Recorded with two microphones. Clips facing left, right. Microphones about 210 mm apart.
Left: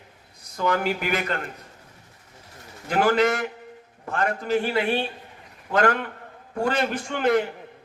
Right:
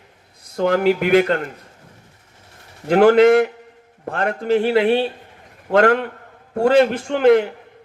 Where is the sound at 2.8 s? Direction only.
60° right (ahead or behind).